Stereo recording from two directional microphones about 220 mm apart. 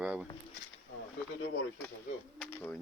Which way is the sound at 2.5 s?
10° left (ahead or behind).